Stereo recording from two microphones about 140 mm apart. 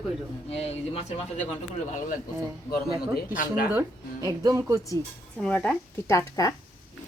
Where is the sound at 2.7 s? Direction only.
85° left.